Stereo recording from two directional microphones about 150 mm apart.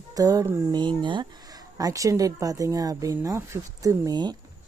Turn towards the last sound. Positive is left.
turn(degrees=-30)  # may be behind; listen again after turning